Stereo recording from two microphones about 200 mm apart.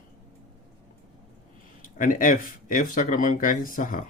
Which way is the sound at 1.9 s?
40° left (ahead or behind).